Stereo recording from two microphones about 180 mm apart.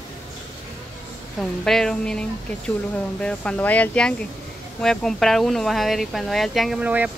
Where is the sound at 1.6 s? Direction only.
5° left (ahead or behind).